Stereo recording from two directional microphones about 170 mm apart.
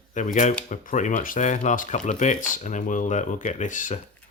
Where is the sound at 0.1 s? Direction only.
45° left (ahead or behind).